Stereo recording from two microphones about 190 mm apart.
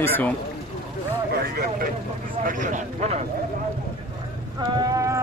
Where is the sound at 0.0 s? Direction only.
10° left (ahead or behind).